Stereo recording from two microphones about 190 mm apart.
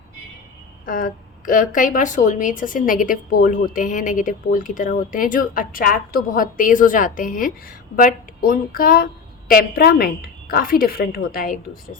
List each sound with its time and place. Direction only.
0.9 s a woman's voice: 45° left (ahead or behind)